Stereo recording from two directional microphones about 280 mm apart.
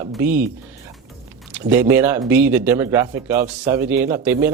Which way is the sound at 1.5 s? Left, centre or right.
Centre.